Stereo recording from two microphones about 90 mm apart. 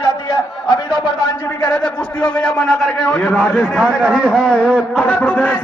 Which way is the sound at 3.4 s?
10° right (ahead or behind).